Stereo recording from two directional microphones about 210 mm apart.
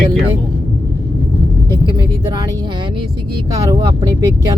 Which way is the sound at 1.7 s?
20° right (ahead or behind).